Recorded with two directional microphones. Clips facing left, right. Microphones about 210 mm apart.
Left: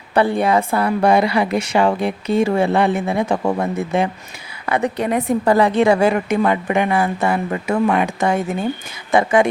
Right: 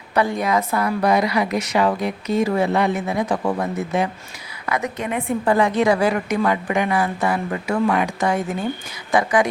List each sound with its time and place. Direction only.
0.1 s a woman's voice: 30° left (ahead or behind)